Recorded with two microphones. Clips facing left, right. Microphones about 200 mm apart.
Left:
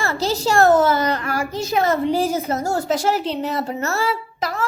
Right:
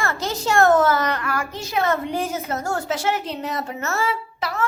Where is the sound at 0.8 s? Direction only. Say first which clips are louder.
Left 2 dB; 25° left (ahead or behind).